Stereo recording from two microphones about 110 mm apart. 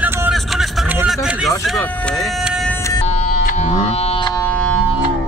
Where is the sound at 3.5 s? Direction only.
90° left; by 4.2 s 65° left (ahead or behind).